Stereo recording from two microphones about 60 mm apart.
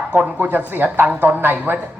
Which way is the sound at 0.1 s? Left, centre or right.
Right.